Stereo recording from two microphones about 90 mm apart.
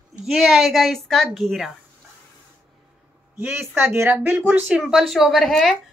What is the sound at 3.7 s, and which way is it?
Speech, 20° right (ahead or behind).